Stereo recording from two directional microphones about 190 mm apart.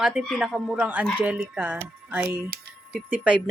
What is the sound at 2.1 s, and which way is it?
Speech, 10° right (ahead or behind).